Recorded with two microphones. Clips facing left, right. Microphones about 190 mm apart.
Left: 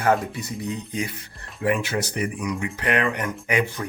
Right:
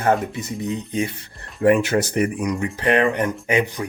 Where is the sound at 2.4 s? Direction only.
35° right (ahead or behind).